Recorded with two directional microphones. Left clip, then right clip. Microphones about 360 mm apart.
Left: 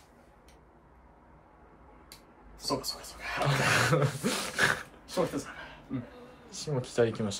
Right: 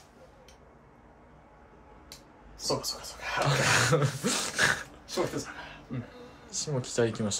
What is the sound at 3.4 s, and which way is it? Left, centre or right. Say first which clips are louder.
Speech: right 1 dB; centre.